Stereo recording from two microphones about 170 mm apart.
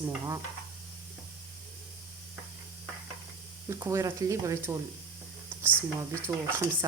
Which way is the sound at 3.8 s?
15° right (ahead or behind).